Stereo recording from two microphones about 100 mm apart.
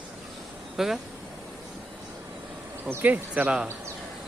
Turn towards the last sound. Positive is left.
turn(degrees=-10)  # may be behind; listen again after turning